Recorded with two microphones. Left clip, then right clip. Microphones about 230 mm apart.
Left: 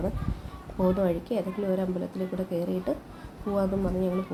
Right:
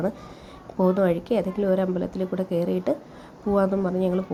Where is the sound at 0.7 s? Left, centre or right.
Right.